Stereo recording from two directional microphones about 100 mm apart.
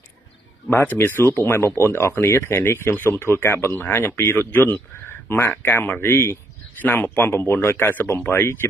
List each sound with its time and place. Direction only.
0.7 s speech: 20° left (ahead or behind)